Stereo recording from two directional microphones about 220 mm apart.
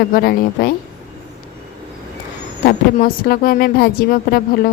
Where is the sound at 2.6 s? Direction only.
40° left (ahead or behind).